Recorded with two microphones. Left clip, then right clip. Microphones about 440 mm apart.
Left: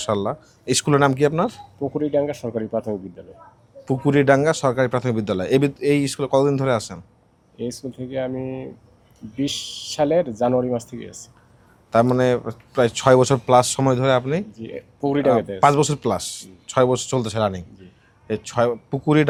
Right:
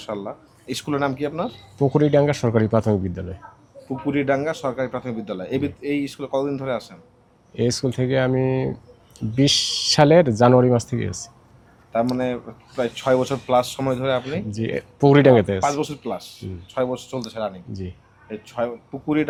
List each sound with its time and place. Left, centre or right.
0.0 s speech: left
1.8 s speech: right
3.8 s speech: left
7.5 s speech: right
11.9 s speech: left
14.5 s speech: right
15.6 s speech: left